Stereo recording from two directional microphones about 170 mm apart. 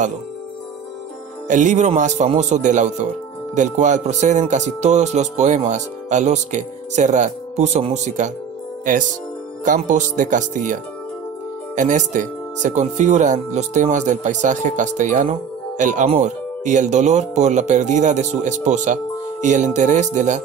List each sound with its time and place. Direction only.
1.5 s speech: 45° right (ahead or behind)
9.7 s speech: 45° right (ahead or behind)